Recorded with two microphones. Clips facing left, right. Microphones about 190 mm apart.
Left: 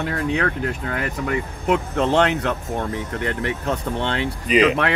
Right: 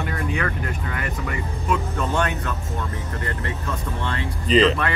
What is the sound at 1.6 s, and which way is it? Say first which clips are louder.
Speech: left 5 dB; 75° left (ahead or behind).